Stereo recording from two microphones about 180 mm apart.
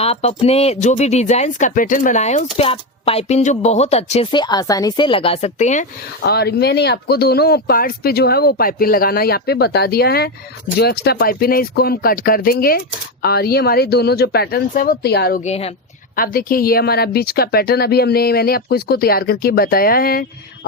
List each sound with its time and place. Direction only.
0.0 s speech: 35° left (ahead or behind)
6.2 s speech: 65° left (ahead or behind)
15.4 s speech: 35° left (ahead or behind)
16.1 s speech: 55° left (ahead or behind)